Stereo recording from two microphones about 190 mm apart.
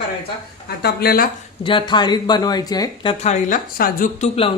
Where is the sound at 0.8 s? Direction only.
55° left (ahead or behind).